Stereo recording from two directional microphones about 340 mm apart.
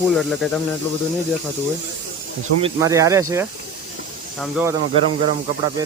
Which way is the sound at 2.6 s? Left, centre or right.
Centre.